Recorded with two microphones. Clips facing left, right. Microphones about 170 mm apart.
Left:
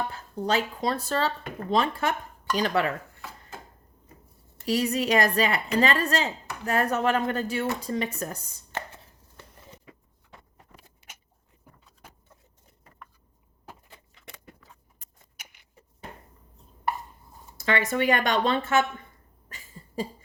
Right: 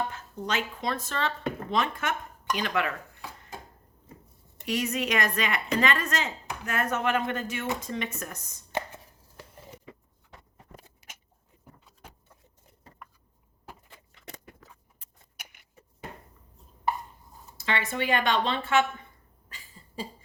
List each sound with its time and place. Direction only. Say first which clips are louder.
0.1 s speech: left 5 dB; 35° left (ahead or behind)
3.2 s chopping: even; 15° right (ahead or behind)
4.6 s speech: left 4 dB; 35° left (ahead or behind)
17.6 s speech: left 5 dB; 45° left (ahead or behind)
19.5 s a sound: left 4 dB; 45° left (ahead or behind)